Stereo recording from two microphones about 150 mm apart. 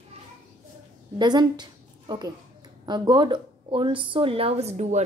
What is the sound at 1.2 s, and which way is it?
Speech, 30° right (ahead or behind).